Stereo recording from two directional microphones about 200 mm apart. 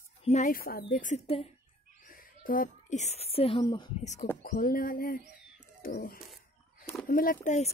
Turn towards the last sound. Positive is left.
turn(degrees=35)  # may be behind; listen again after turning